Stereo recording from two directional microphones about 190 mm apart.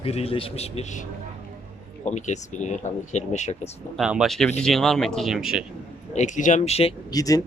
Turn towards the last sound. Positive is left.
turn(degrees=20)  # may be behind; listen again after turning